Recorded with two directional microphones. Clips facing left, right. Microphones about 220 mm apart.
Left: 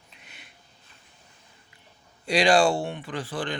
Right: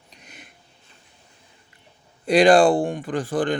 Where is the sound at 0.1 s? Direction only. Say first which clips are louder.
Right 7 dB; 45° right (ahead or behind).